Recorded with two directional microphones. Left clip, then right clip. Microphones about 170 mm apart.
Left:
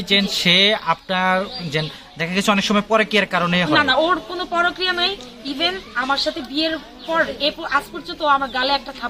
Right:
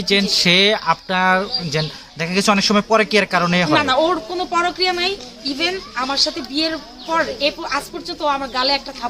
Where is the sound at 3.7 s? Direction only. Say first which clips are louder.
Left 1 dB; 15° right (ahead or behind).